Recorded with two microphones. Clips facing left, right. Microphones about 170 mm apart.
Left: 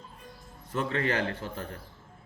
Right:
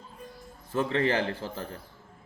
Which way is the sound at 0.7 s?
25° right (ahead or behind).